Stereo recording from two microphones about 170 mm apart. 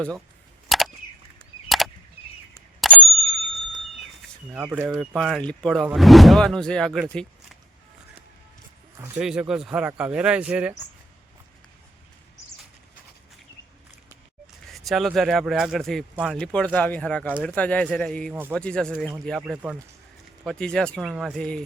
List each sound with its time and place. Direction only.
0.7 s a sound: centre (ahead or behind)
2.8 s bicycle bell: centre (ahead or behind)
4.5 s speech: 10° right (ahead or behind)
9.0 s speech: 5° right (ahead or behind)
14.7 s speech: centre (ahead or behind)
20.4 s speech: 5° left (ahead or behind)